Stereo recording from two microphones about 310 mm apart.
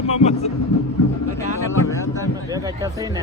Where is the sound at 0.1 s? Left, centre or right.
Left.